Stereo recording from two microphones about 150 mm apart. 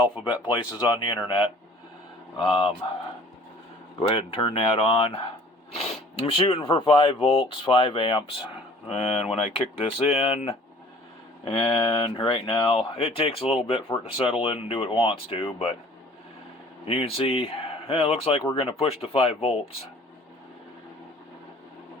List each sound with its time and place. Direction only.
0.4 s speech: 30° left (ahead or behind)
2.4 s speech: 35° left (ahead or behind)
4.1 s speech: 35° left (ahead or behind)
16.8 s speech: 40° left (ahead or behind)